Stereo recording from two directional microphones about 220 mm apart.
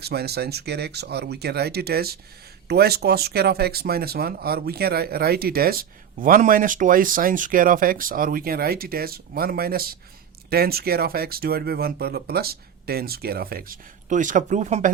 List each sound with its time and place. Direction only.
0.0 s speech: 45° right (ahead or behind)